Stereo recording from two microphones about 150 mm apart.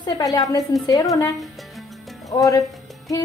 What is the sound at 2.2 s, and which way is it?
Speech, 25° left (ahead or behind).